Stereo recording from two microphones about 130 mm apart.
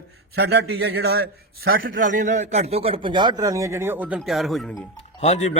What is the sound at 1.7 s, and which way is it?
A man's voice, 85° right.